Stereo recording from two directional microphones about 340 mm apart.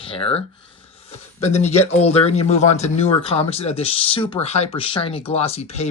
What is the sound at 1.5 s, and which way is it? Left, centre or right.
Speech, centre.